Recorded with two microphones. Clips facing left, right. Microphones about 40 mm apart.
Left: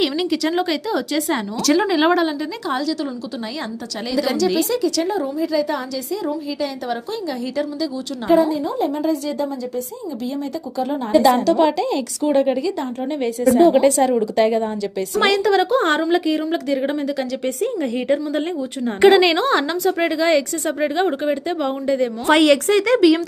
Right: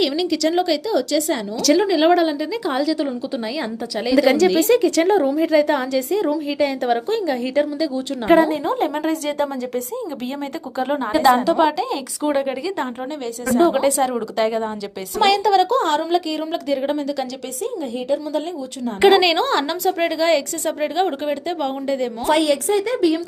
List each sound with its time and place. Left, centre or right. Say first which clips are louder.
0.0 s a woman's voice: right 1 dB; centre
2.6 s speech: right 2 dB; centre
4.2 s a woman's voice: right 3 dB; right
5.0 s a woman's voice: right 5 dB; right
8.3 s a woman's voice: right 1 dB; right
10.8 s a woman's voice: right 1 dB; right
11.2 s speech: right 1 dB; centre
11.6 s a woman's voice: left 1 dB; centre
13.2 s a woman's voice: left 3 dB; centre
17.6 s a woman's voice: even; left
19.0 s a woman's voice: left 1 dB; centre
22.3 s speech: left 3 dB; left